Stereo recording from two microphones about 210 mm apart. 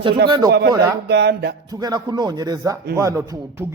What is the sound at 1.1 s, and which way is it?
Speech, 55° right (ahead or behind).